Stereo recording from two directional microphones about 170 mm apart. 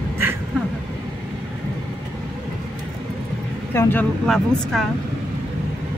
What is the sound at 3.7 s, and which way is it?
Speech, 10° left (ahead or behind).